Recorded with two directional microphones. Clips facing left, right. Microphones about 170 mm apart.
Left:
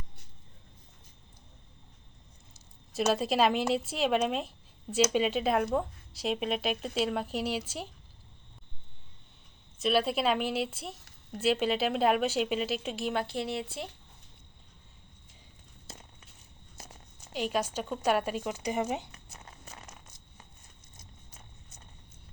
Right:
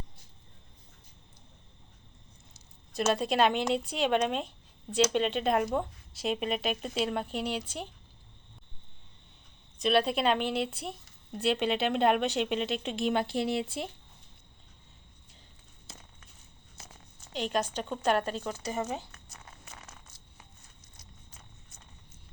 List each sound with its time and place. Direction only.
2.9 s speech: centre (ahead or behind)
9.7 s speech: centre (ahead or behind)
13.1 s speech: 15° right (ahead or behind)
17.3 s speech: 5° left (ahead or behind)